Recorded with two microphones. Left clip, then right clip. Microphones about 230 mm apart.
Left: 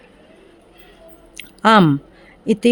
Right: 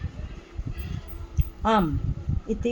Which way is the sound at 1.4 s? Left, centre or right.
Left.